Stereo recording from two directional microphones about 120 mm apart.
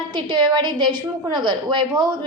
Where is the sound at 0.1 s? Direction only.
40° right (ahead or behind).